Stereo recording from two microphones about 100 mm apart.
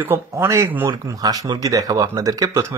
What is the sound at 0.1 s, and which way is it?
Speech, 25° right (ahead or behind).